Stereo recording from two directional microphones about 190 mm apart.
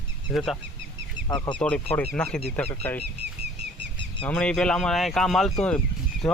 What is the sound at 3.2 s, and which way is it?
Bird flight, 65° right (ahead or behind).